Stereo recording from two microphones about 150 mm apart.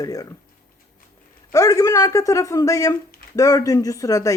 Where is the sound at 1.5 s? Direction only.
20° left (ahead or behind).